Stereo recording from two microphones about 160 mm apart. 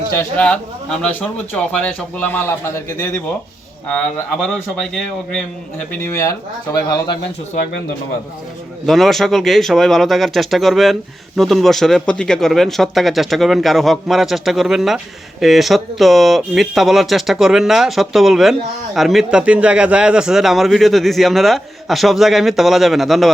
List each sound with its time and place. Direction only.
0.2 s a man's voice: 10° left (ahead or behind)
3.8 s speech: 5° left (ahead or behind)
6.0 s speech: 15° left (ahead or behind)
8.9 s speech: centre (ahead or behind)